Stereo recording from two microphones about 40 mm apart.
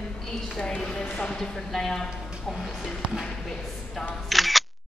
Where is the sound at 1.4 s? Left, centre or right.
Centre.